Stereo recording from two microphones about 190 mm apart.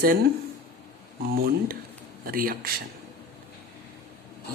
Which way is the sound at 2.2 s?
50° right (ahead or behind).